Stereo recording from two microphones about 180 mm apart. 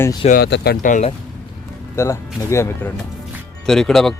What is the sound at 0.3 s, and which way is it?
Speech, 60° left (ahead or behind).